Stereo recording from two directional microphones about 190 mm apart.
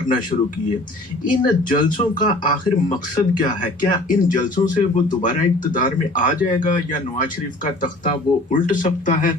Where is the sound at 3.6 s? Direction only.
45° left (ahead or behind).